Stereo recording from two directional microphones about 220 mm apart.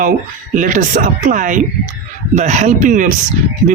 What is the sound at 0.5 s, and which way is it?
Speech, 35° right (ahead or behind).